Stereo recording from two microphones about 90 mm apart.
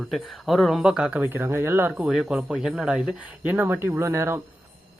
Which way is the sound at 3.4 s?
20° right (ahead or behind).